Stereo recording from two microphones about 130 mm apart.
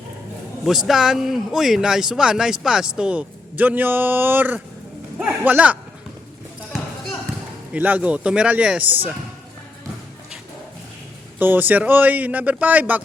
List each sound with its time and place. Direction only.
0.6 s speech: centre (ahead or behind)
6.7 s basketball bounce: centre (ahead or behind)
7.7 s speech: 10° right (ahead or behind)
11.3 s speech: 15° right (ahead or behind)